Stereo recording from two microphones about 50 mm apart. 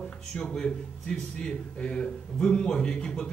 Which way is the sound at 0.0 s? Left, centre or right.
Centre.